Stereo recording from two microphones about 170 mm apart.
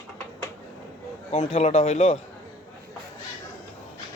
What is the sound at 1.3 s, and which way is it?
Speech, 40° left (ahead or behind).